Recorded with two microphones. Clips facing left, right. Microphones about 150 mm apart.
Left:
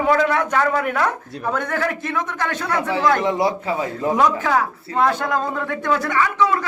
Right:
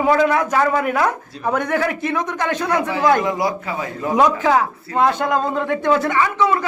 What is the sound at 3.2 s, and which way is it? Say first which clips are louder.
Speech: left 1 dB; 25° left (ahead or behind).